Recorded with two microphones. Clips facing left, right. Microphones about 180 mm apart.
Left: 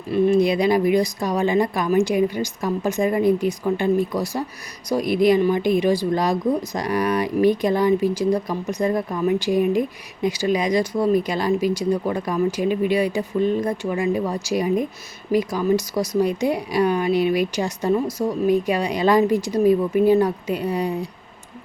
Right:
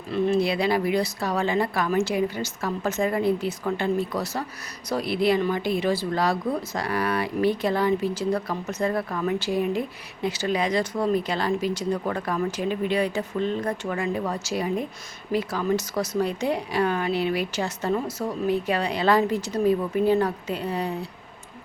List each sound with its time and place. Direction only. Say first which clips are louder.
0.1 s a woman's voice: left 5 dB; 15° left (ahead or behind)